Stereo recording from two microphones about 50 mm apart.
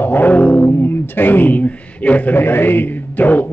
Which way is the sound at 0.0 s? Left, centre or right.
Left.